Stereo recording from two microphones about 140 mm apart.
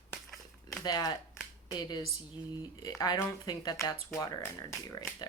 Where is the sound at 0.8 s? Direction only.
30° left (ahead or behind).